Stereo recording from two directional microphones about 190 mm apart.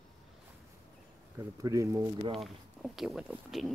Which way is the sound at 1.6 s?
15° right (ahead or behind).